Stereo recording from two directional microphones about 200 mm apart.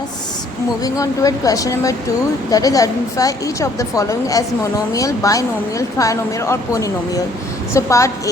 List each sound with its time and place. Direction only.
0.8 s a woman's voice: 15° left (ahead or behind)